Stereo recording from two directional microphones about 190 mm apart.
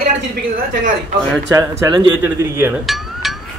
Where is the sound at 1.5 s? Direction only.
20° right (ahead or behind).